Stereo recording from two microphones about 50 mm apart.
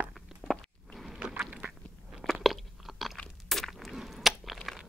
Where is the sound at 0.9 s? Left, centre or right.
Centre.